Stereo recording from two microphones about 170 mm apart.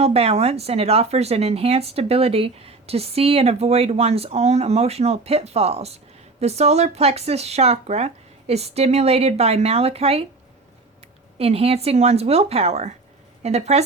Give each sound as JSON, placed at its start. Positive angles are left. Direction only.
{"t": 0.0, "sound": "speech", "side_deg": -35}
{"t": 11.3, "sound": "speech", "side_deg": -35}